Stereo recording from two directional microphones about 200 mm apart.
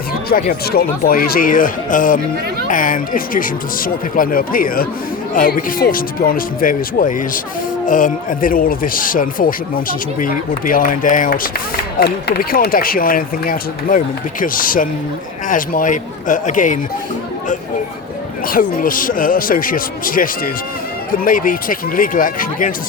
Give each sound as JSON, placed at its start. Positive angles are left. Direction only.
{"t": 0.3, "sound": "speech", "side_deg": 45}
{"t": 11.9, "sound": "a man's voice", "side_deg": 55}
{"t": 18.4, "sound": "speech", "side_deg": 45}